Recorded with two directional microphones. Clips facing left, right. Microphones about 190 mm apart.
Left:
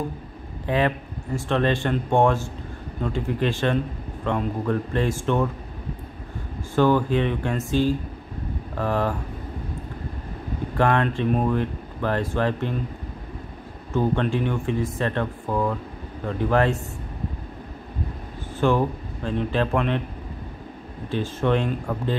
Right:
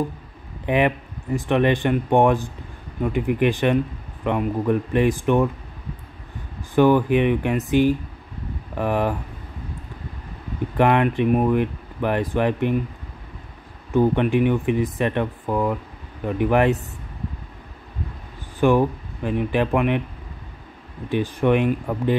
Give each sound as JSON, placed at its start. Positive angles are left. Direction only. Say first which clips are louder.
{"t": 0.7, "sound": "speech", "louder": "right 3 dB", "side_deg": -15}
{"t": 6.7, "sound": "speech", "louder": "right 3 dB", "side_deg": -15}
{"t": 10.8, "sound": "speech", "louder": "right 3 dB", "side_deg": -15}
{"t": 13.9, "sound": "speech", "louder": "right 5 dB", "side_deg": -15}
{"t": 18.6, "sound": "speech", "louder": "right 4 dB", "side_deg": -15}
{"t": 21.1, "sound": "speech", "louder": "right 3 dB", "side_deg": -15}